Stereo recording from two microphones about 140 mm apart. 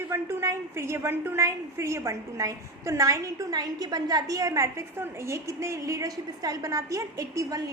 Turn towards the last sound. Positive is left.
turn(degrees=-25)  # may be behind; listen again after turning